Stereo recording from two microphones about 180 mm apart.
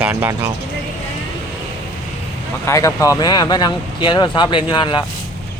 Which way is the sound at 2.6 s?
15° left (ahead or behind).